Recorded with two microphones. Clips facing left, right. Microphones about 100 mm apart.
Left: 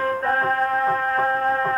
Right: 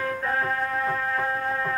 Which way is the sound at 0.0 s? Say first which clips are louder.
Left 5 dB; 40° left (ahead or behind).